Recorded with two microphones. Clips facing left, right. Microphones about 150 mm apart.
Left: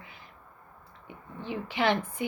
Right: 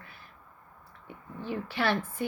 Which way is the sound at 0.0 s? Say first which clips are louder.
Left 1 dB; 15° left (ahead or behind).